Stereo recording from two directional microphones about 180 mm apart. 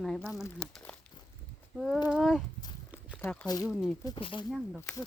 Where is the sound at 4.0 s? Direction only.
25° left (ahead or behind).